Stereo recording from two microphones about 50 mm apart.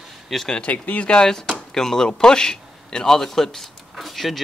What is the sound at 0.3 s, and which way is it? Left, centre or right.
Speech, centre.